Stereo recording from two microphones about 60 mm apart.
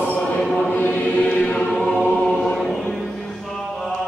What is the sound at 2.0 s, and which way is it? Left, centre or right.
Choir, centre.